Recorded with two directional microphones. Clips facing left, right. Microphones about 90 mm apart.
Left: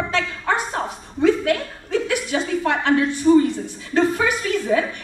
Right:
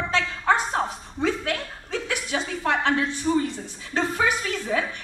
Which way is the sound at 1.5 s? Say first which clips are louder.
Left 8 dB; 45° left (ahead or behind).